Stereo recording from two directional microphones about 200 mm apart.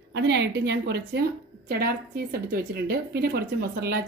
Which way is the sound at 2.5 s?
50° right (ahead or behind).